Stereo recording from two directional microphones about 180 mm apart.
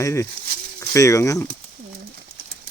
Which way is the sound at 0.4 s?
55° right (ahead or behind).